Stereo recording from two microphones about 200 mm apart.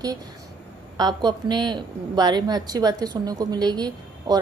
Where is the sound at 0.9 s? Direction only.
20° right (ahead or behind).